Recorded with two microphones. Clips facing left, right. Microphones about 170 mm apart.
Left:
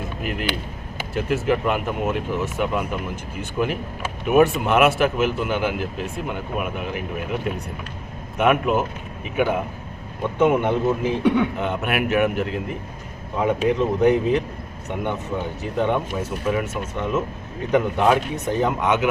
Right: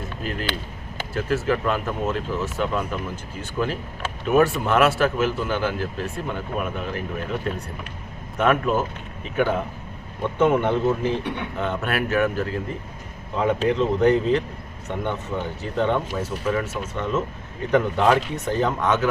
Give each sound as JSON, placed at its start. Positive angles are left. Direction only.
{"t": 0.2, "sound": "speech", "side_deg": 15}
{"t": 15.6, "sound": "speech", "side_deg": 15}